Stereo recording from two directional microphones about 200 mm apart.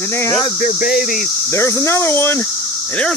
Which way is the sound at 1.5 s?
15° left (ahead or behind).